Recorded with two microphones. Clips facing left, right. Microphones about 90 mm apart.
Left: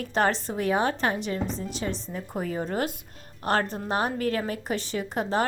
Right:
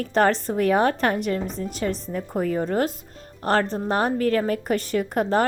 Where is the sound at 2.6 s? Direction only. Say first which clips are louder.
Right 5 dB; 40° right (ahead or behind).